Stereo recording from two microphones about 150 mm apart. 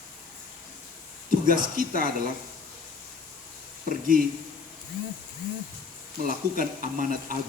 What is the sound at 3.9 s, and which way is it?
Speech, 70° right (ahead or behind).